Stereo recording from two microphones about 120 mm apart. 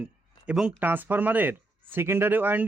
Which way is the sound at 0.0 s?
10° right (ahead or behind).